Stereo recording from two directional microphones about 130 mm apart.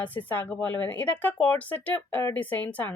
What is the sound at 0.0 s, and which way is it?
Speech, 15° left (ahead or behind).